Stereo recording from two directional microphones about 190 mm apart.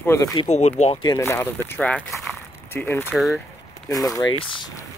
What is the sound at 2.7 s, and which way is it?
Speech, 10° left (ahead or behind).